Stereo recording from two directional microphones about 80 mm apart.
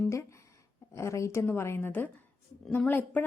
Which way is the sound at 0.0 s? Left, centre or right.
Left.